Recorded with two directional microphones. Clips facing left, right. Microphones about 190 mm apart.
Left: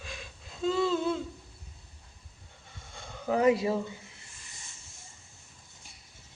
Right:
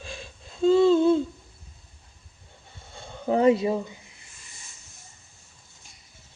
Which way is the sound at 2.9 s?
30° right (ahead or behind).